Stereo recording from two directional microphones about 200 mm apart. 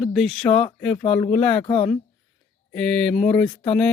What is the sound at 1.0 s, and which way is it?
Speech, 30° left (ahead or behind).